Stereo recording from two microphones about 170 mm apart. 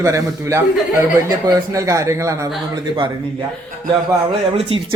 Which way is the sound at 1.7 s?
20° right (ahead or behind).